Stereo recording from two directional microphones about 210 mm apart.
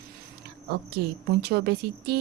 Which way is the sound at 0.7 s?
50° right (ahead or behind).